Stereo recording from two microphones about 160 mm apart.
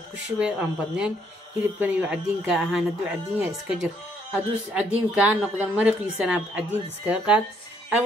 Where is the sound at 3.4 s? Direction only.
15° right (ahead or behind).